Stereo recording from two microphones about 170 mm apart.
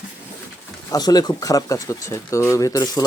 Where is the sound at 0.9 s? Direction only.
25° left (ahead or behind).